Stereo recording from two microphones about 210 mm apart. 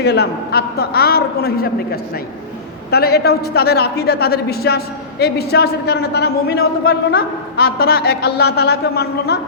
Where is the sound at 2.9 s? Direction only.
50° left (ahead or behind).